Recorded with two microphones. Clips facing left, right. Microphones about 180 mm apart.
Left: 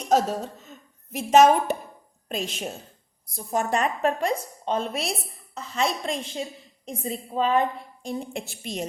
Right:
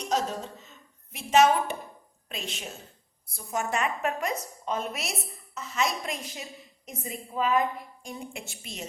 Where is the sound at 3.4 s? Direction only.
35° left (ahead or behind).